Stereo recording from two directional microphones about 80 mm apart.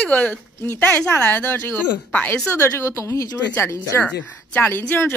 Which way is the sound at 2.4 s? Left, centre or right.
Left.